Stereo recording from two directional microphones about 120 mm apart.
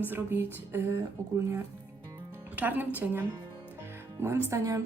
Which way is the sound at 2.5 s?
15° right (ahead or behind).